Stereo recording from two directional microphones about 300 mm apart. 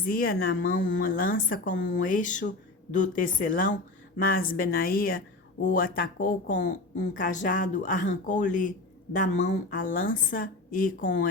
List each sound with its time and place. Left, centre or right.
0.0 s a woman's voice: left